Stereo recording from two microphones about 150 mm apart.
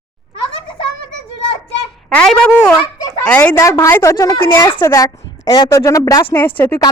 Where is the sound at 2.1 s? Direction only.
5° left (ahead or behind).